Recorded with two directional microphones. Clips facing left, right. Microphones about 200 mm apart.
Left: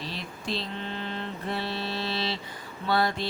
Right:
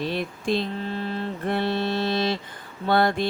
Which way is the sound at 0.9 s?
35° right (ahead or behind).